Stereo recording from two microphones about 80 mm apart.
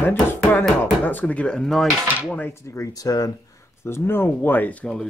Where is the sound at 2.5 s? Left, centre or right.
Left.